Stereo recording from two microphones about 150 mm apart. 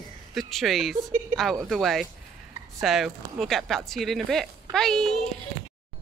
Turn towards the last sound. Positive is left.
turn(degrees=5)  # may be behind; listen again after turning